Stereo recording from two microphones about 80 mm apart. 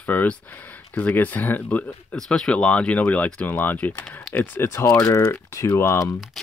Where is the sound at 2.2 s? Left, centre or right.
Centre; by 6.1 s left.